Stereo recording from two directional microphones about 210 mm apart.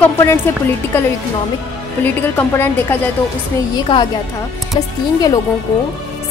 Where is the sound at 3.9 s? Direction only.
20° left (ahead or behind).